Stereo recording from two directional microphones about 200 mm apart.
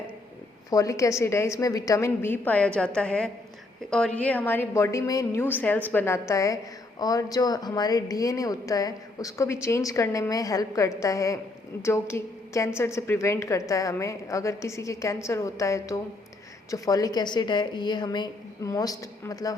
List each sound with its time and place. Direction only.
0.7 s a woman's voice: 15° left (ahead or behind)